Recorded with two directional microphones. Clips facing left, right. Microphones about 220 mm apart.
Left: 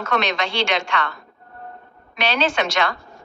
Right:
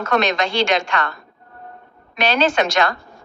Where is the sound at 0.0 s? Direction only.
45° right (ahead or behind).